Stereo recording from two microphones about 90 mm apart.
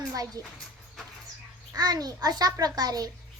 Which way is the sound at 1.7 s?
45° right (ahead or behind).